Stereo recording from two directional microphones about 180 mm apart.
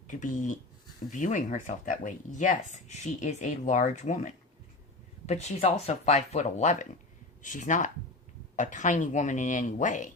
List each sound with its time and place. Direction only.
0.1 s speech: 45° left (ahead or behind)